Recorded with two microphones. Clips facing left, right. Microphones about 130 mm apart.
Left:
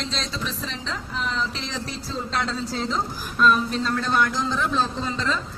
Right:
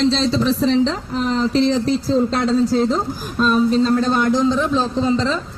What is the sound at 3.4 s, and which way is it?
A man's voice, 30° right (ahead or behind).